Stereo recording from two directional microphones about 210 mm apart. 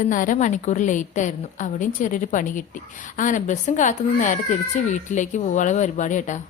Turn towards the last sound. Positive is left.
turn(degrees=35)  # may be behind; listen again after turning